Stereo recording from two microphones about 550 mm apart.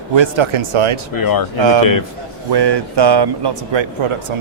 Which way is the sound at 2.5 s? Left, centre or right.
Right.